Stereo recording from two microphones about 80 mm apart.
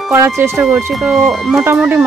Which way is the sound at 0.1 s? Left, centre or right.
Right.